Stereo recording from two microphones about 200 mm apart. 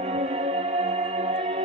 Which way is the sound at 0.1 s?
30° right (ahead or behind).